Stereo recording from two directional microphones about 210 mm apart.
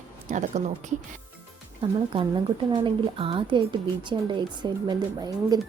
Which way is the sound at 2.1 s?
25° right (ahead or behind).